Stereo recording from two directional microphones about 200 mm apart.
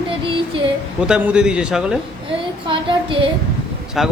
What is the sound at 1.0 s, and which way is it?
Speech, 5° right (ahead or behind).